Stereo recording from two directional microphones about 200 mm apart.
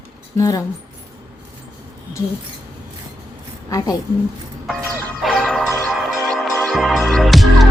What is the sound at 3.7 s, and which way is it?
Speech, 20° left (ahead or behind).